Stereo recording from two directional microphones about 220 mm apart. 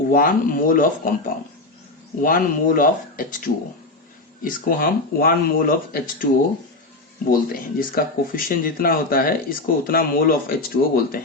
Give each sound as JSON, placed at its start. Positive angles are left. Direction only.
{"t": 0.1, "sound": "speech", "side_deg": 40}